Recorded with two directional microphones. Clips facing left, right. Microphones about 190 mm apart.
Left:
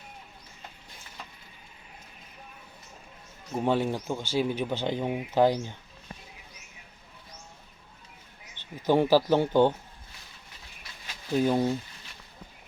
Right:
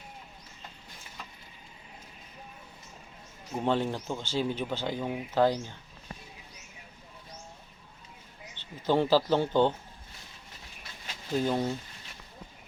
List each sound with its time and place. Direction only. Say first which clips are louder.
3.5 s speech: left 2 dB; 10° left (ahead or behind)
8.6 s a sound: right 1 dB; 15° left (ahead or behind)
8.9 s speech: left 3 dB; 15° left (ahead or behind)
11.3 s speech: left 4 dB; 15° left (ahead or behind)